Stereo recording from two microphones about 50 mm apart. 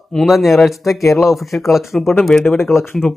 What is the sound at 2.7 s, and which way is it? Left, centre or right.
Speech, centre.